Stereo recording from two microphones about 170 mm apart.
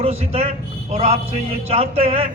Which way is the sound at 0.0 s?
35° right (ahead or behind).